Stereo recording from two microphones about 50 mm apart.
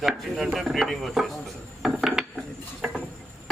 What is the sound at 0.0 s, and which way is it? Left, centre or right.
Speech, centre.